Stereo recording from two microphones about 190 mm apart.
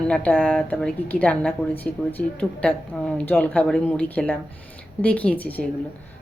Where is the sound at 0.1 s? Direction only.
5° left (ahead or behind).